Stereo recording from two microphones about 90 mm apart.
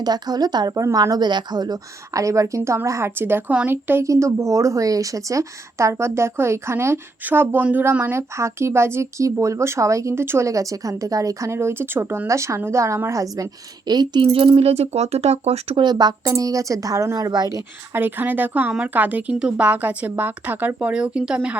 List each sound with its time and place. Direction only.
0.0 s speech: 50° right (ahead or behind); by 4.0 s 25° right (ahead or behind)
4.0 s speech: 35° right (ahead or behind); by 14.3 s 50° right (ahead or behind)
14.3 s speech: 90° right
15.7 s speech: 55° right (ahead or behind)
17.9 s speech: 20° right (ahead or behind)